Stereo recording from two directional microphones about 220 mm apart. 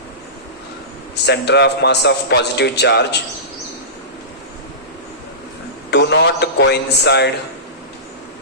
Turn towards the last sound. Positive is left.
turn(degrees=50)  # may be behind; listen again after turning